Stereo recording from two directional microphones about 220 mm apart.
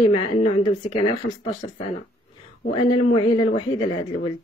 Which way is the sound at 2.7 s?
25° left (ahead or behind).